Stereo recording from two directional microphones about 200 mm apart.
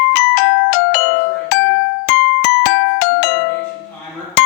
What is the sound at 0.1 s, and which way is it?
Music, 60° left (ahead or behind).